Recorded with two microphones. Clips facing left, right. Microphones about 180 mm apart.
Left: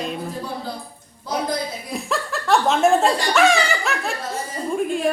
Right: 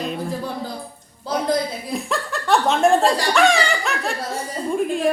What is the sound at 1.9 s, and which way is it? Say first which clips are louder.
Speech: right 1 dB; centre (ahead or behind).